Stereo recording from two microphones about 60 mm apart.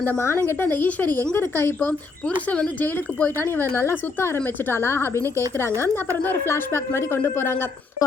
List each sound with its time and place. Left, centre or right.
0.0 s speech: left
0.9 s speech: left
1.4 s a woman's voice: left
2.2 s speech: centre
2.8 s a woman's voice: left